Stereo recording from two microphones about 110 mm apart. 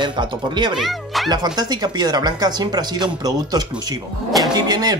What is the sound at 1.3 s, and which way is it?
Speech, 40° right (ahead or behind).